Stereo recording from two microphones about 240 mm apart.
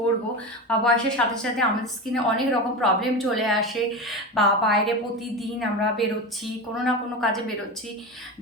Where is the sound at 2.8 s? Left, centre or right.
Centre.